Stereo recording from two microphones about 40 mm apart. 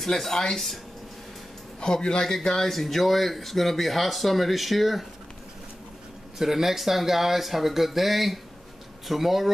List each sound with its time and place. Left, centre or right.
0.0 s speech: centre
1.8 s speech: centre
6.3 s speech: centre